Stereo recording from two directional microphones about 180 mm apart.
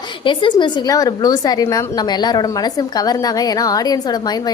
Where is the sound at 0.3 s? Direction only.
25° left (ahead or behind).